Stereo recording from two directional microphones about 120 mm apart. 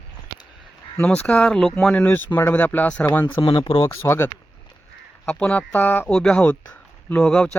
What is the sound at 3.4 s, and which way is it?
Speech, 50° left (ahead or behind).